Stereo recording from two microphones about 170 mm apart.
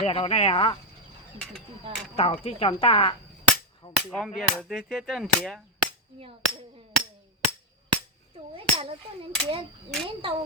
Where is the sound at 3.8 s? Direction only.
35° left (ahead or behind).